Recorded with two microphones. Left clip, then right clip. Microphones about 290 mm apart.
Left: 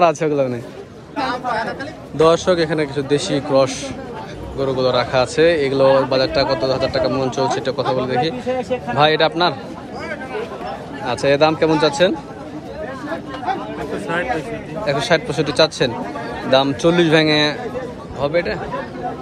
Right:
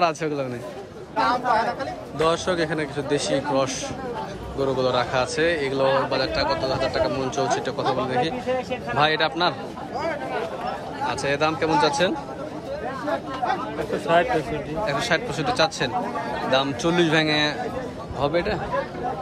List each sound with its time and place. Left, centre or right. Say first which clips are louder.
0.0 s a man's voice: left 8 dB; centre
1.1 s a sound: even; right
2.1 s a man's voice: left 8 dB; centre
11.2 s a man's voice: left 9 dB; centre
14.9 s a man's voice: left 7 dB; centre